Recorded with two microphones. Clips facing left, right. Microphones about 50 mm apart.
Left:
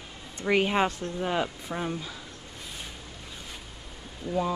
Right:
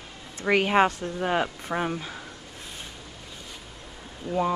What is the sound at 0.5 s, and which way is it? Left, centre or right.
Speech, right.